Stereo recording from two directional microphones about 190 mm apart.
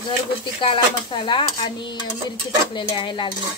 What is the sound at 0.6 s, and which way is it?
Dishes, 25° left (ahead or behind).